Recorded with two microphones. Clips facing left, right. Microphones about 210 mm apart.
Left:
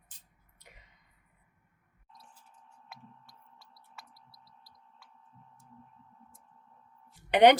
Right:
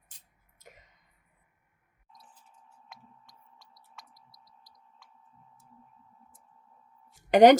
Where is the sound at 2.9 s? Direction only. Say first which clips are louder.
Left 2 dB; 10° left (ahead or behind).